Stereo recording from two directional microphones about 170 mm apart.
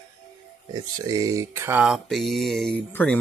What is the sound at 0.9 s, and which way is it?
Speech, 20° right (ahead or behind).